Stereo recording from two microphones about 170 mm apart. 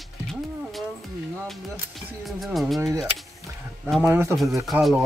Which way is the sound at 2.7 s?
20° right (ahead or behind).